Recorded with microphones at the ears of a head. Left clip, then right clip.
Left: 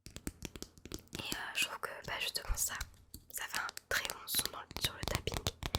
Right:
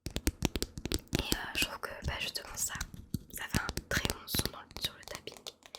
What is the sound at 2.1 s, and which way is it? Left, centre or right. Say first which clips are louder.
Whispering: even; centre.